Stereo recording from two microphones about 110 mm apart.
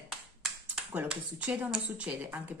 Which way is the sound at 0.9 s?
10° right (ahead or behind).